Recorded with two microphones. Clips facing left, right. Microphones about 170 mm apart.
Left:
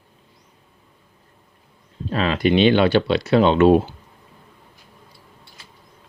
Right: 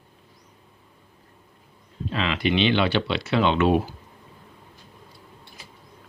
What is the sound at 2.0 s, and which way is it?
Speech, 40° left (ahead or behind).